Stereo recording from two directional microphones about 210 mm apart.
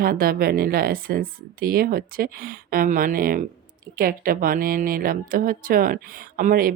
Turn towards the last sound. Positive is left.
turn(degrees=-45)  # may be behind; listen again after turning